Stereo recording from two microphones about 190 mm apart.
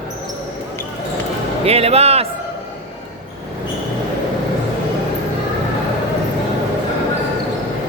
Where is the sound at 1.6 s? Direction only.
30° right (ahead or behind).